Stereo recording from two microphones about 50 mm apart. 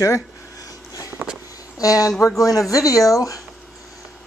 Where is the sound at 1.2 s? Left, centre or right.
Right.